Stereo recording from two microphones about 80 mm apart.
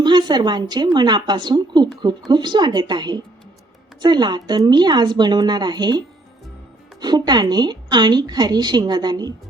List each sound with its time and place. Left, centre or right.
0.0 s a woman's voice: right
7.0 s a woman's voice: right